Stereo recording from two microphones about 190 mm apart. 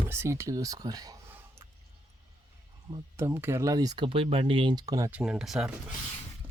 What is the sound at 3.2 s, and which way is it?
Speech, 15° right (ahead or behind).